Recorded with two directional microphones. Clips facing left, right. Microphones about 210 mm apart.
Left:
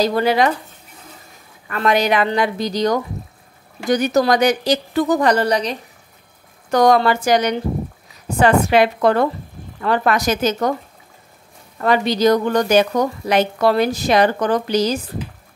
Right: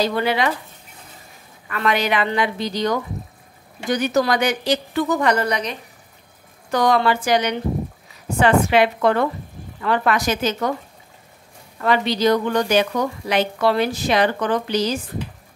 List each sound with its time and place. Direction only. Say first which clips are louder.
0.0 s a woman's voice: left 4 dB; 40° left (ahead or behind)
1.7 s a woman's voice: left 4 dB; 40° left (ahead or behind)
11.8 s a woman's voice: left 3 dB; 45° left (ahead or behind)